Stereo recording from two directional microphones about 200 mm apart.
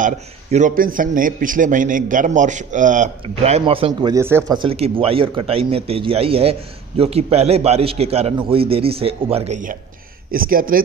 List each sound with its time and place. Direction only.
0.0 s a man's voice: 40° right (ahead or behind); by 4.6 s 10° right (ahead or behind)
4.6 s a man's voice: 30° right (ahead or behind); by 10.8 s 45° right (ahead or behind)